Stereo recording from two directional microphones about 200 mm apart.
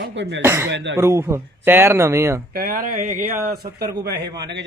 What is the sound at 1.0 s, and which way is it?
A man's voice, 15° right (ahead or behind).